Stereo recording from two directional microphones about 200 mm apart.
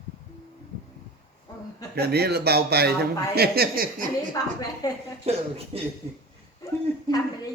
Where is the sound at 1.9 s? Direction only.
55° right (ahead or behind).